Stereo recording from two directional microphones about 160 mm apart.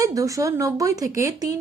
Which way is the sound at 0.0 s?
20° right (ahead or behind).